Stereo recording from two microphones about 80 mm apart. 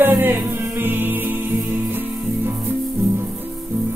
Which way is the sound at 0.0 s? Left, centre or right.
Right.